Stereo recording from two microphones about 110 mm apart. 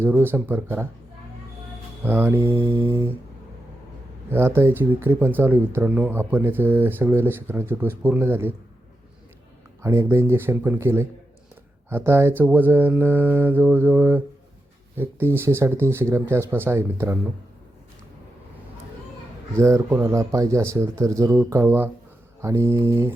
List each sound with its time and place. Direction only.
0.0 s speech: 20° right (ahead or behind)
2.0 s speech: 15° right (ahead or behind)
4.3 s speech: 20° right (ahead or behind)
9.8 s speech: 25° right (ahead or behind)
12.5 s mantra: 15° right (ahead or behind)
14.9 s speech: 20° right (ahead or behind)
19.5 s speech: 25° right (ahead or behind)